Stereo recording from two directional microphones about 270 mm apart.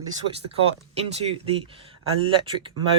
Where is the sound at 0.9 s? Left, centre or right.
Right.